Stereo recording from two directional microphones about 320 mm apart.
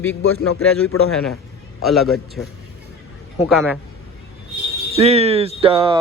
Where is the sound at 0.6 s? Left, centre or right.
Centre.